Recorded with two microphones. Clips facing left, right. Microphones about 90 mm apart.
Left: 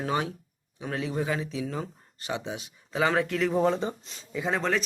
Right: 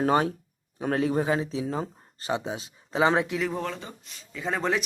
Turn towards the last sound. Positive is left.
turn(degrees=-10)  # may be behind; listen again after turning